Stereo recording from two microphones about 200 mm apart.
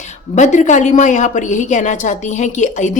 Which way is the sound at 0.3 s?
35° left (ahead or behind).